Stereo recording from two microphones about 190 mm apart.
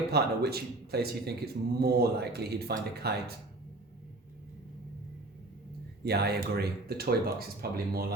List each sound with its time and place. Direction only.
0.1 s speech: 60° right (ahead or behind)
6.1 s speech: 60° right (ahead or behind)